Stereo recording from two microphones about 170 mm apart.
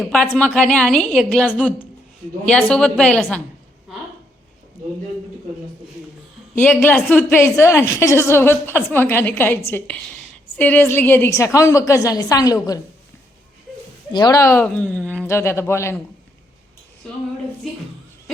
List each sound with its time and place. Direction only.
0.0 s a woman's voice: 5° left (ahead or behind)
2.5 s a woman's voice: 5° left (ahead or behind)
6.6 s a woman's voice: 10° left (ahead or behind)
14.1 s a woman's voice: 25° left (ahead or behind)